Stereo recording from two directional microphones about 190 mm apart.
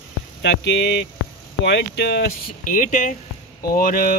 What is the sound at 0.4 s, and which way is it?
A man's voice, 65° left (ahead or behind).